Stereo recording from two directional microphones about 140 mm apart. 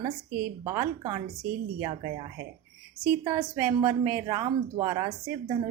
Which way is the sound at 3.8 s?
15° right (ahead or behind).